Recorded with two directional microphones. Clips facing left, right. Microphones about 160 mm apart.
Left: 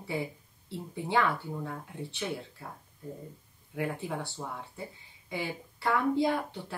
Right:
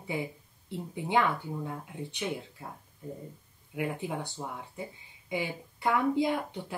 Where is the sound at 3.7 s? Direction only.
15° right (ahead or behind).